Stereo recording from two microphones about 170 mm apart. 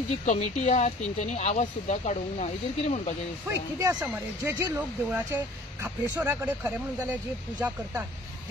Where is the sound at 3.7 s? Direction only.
15° right (ahead or behind).